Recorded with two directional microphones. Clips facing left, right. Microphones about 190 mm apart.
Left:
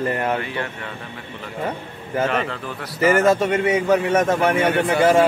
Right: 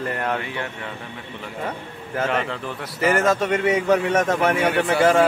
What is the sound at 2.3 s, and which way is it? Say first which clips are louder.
Speech: left 1 dB; 20° right (ahead or behind).